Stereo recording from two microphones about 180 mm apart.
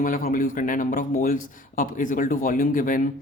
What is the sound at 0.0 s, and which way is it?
A man's voice, 50° left (ahead or behind).